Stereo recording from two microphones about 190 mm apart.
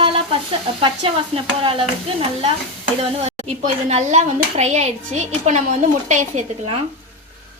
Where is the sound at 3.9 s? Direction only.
35° right (ahead or behind).